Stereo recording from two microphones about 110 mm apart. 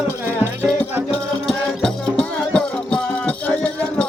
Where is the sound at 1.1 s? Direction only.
5° left (ahead or behind).